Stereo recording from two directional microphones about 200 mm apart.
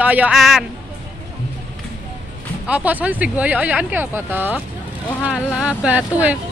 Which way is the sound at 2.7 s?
10° right (ahead or behind).